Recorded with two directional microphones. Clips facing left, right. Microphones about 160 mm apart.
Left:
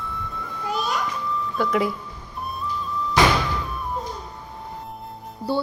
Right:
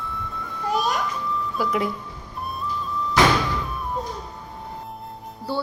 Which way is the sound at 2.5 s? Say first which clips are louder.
Even; centre (ahead or behind).